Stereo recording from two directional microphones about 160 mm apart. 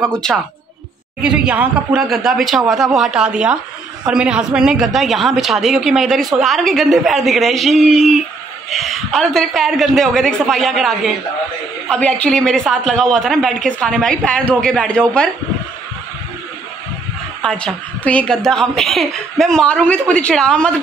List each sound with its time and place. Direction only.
0.1 s a woman's voice: 5° left (ahead or behind)
17.4 s a woman's voice: 5° left (ahead or behind)